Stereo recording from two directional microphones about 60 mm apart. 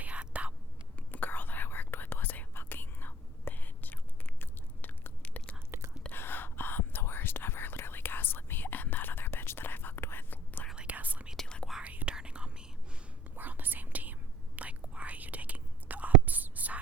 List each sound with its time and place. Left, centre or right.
0.0 s whispering: right
0.9 s whispering: left
4.4 s chewing: left
6.1 s whispering: left
10.8 s whispering: right
11.3 s whispering: centre
11.8 s whispering: right
13.3 s whispering: right